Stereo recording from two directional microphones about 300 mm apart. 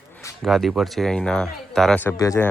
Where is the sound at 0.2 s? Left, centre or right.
Centre.